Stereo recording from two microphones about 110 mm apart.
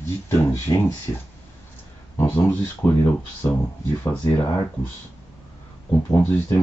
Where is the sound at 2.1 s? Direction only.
25° left (ahead or behind).